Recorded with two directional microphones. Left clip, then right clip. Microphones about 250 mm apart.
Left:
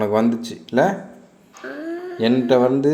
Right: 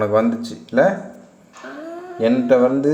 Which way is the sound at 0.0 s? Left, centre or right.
Left.